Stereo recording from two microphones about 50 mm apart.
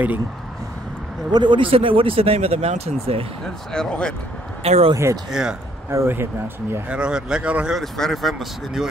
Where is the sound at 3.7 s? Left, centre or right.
Centre.